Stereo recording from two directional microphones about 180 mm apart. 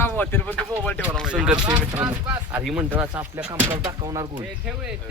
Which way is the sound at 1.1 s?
5° right (ahead or behind).